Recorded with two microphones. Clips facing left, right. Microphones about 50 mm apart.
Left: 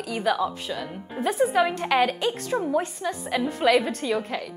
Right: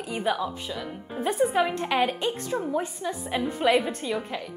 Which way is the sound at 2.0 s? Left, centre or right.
Left.